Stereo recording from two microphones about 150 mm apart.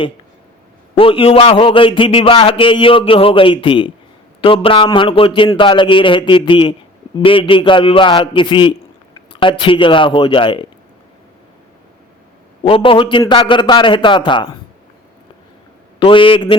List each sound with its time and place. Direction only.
0.9 s a man's voice: 35° left (ahead or behind)
12.6 s a man's voice: 35° left (ahead or behind)
16.0 s a man's voice: 35° left (ahead or behind)